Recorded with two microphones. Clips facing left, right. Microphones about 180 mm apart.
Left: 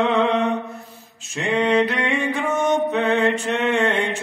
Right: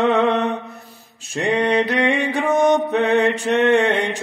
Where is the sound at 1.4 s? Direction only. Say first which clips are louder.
Even; 35° right (ahead or behind).